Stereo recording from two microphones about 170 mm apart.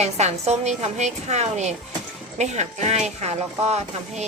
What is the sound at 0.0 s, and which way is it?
A woman's voice, 40° right (ahead or behind).